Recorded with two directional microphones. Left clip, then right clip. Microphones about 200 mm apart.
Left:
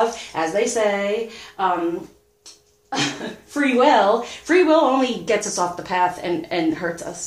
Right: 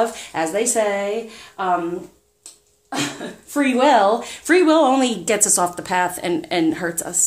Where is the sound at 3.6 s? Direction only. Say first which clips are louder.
Right 1 dB; 50° right (ahead or behind).